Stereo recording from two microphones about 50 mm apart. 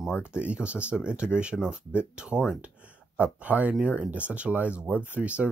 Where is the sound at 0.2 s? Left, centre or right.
Right.